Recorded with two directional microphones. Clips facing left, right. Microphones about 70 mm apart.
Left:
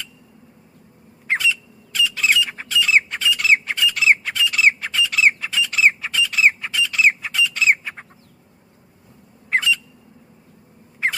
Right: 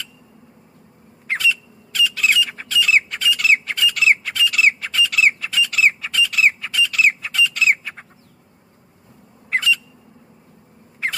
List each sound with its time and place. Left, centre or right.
1.3 s bird: left
2.0 s squawk: left
9.5 s squawk: left